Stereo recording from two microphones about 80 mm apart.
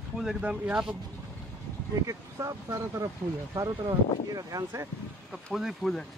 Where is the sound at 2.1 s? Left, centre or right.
Right.